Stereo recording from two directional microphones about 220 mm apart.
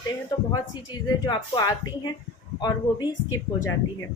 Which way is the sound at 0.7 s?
20° left (ahead or behind).